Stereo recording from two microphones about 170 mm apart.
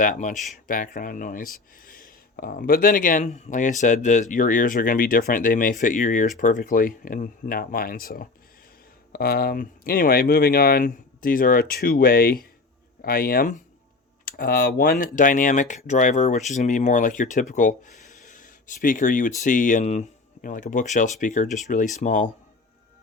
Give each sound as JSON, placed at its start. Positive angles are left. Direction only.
{"t": 0.0, "sound": "speech", "side_deg": 50}